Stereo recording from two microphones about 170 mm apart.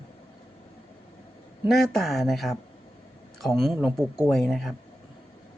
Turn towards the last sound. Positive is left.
turn(degrees=0)  # may be behind; listen again after turning